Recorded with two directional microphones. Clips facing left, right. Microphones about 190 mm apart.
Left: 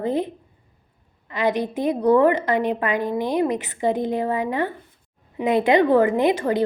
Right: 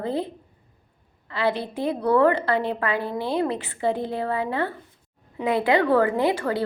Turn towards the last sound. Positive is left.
turn(degrees=20)  # may be behind; listen again after turning